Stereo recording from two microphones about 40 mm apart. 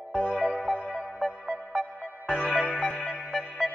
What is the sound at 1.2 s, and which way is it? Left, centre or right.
Music, centre.